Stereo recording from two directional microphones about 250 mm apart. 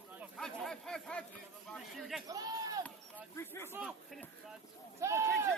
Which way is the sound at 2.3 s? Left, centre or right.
Centre.